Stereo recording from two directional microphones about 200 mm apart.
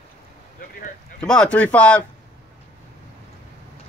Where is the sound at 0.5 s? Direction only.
45° left (ahead or behind).